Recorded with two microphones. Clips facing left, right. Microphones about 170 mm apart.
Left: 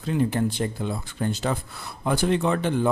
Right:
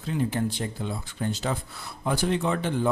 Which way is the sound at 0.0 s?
55° left (ahead or behind).